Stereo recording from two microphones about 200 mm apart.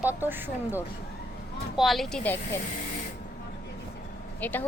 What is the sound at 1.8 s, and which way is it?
Speech, centre (ahead or behind).